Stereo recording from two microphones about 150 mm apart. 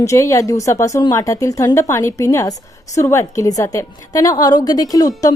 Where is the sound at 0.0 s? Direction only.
20° left (ahead or behind).